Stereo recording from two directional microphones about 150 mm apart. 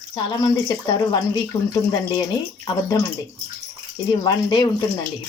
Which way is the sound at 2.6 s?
25° left (ahead or behind).